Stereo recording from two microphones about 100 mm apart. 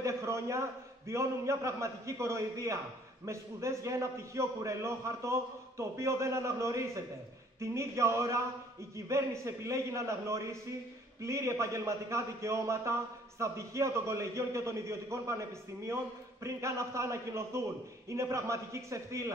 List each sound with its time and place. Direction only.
0.0 s a man's voice: 30° right (ahead or behind)
16.4 s a man's voice: 30° right (ahead or behind)